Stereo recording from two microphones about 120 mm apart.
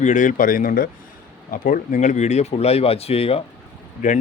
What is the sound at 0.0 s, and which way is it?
Speech, 90° left.